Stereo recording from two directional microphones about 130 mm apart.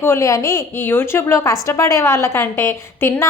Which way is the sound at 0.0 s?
20° left (ahead or behind).